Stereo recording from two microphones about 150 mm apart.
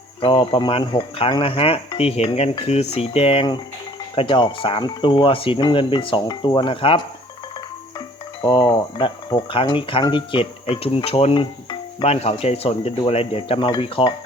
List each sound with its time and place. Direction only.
0.2 s speech: 35° left (ahead or behind)
8.4 s speech: 35° left (ahead or behind)
12.0 s speech: 45° left (ahead or behind)